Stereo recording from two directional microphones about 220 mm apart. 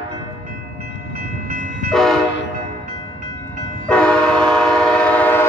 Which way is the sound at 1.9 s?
Centre (ahead or behind).